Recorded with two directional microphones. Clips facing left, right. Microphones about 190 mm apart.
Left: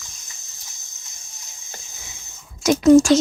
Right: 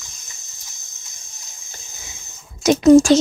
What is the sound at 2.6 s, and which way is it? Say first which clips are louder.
Speech: right 2 dB; 25° right (ahead or behind).